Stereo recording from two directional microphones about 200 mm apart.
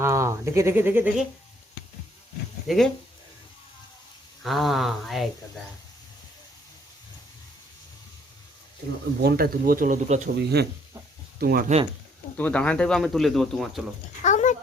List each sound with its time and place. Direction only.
0.0 s speech: 15° right (ahead or behind)
2.6 s speech: centre (ahead or behind)
4.4 s speech: centre (ahead or behind)
9.2 s speech: 50° right (ahead or behind)
12.4 s speech: 5° left (ahead or behind)
14.3 s a sound: 35° left (ahead or behind)